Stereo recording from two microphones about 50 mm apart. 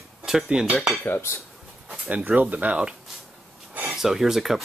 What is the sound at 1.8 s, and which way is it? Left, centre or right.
Speech, right.